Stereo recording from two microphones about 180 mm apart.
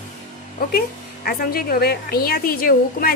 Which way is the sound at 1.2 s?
55° left (ahead or behind).